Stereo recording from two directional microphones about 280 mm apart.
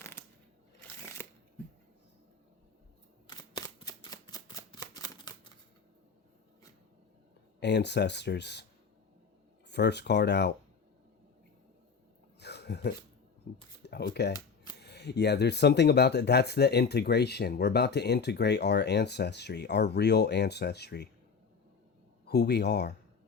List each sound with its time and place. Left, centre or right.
1.2 s shuffling cards: centre
3.8 s camera: centre
7.6 s speech: left
9.6 s speech: left
12.4 s a sound: left
13.8 s speech: left
14.3 s camera: centre
14.8 s speech: left
22.3 s speech: left